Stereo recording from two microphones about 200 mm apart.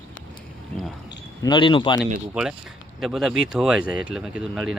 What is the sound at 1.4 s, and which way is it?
Speech, 25° left (ahead or behind).